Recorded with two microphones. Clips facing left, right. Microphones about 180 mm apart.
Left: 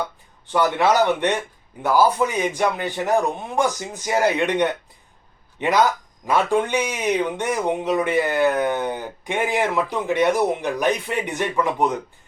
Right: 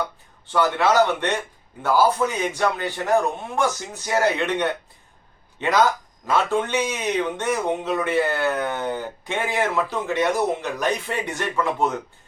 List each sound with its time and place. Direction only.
0.4 s speech: 15° left (ahead or behind)